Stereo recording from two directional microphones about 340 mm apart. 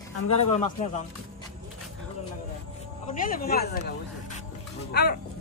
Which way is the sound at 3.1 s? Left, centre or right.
Left.